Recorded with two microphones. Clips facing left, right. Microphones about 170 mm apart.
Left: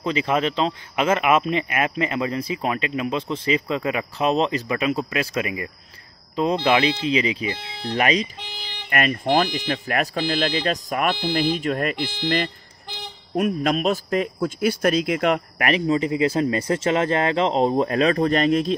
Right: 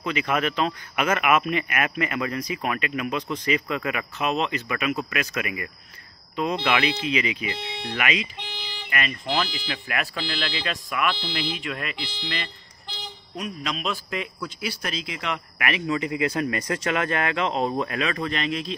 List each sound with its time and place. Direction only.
0.0 s a man's voice: 30° left (ahead or behind)
8.9 s a man's voice: 50° left (ahead or behind)